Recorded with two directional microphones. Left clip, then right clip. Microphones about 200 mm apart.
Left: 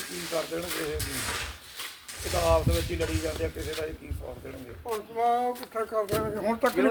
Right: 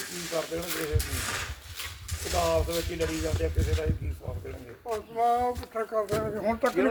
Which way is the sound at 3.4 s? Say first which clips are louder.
Right 1 dB; centre (ahead or behind).